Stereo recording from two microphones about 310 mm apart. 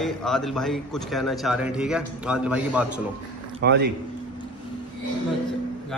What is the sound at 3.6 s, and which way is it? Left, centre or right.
Speech, right.